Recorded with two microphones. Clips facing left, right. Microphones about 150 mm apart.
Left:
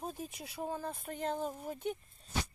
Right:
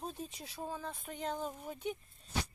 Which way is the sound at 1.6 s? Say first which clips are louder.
Left 2 dB; 45° left (ahead or behind).